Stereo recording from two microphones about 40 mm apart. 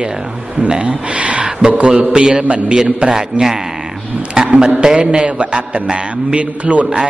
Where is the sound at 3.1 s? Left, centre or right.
Centre.